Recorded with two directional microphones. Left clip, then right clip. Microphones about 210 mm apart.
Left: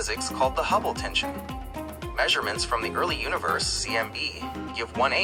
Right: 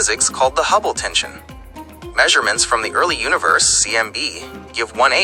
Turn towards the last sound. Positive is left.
turn(degrees=-45)  # may be behind; listen again after turning